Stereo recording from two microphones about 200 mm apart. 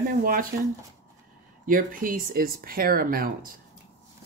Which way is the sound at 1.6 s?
45° right (ahead or behind).